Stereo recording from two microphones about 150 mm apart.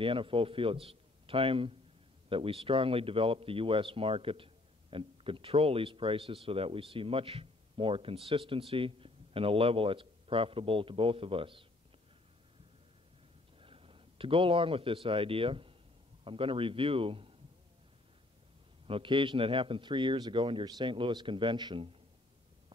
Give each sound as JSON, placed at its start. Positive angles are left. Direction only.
{"t": 0.0, "sound": "speech", "side_deg": -35}
{"t": 13.6, "sound": "a man's voice", "side_deg": -40}
{"t": 18.9, "sound": "speech", "side_deg": -35}